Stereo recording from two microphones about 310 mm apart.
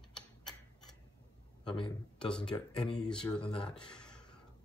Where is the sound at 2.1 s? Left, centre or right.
Centre.